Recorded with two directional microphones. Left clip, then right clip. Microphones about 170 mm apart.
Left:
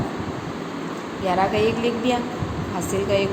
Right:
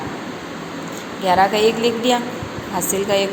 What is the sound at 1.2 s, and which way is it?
A woman's voice, 20° right (ahead or behind).